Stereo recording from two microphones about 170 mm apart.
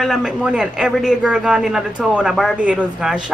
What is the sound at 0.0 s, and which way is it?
A woman's voice, centre (ahead or behind).